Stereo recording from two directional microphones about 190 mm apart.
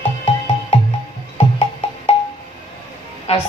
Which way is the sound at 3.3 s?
35° left (ahead or behind).